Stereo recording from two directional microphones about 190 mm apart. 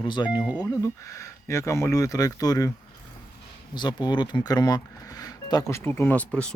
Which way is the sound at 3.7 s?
25° left (ahead or behind).